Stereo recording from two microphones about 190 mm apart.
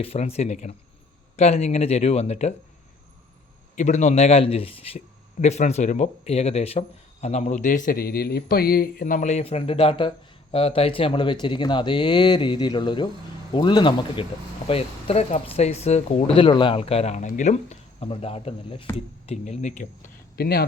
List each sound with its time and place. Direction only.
0.0 s a man's voice: 30° left (ahead or behind)
3.8 s a man's voice: 40° left (ahead or behind); by 20.7 s 55° left (ahead or behind)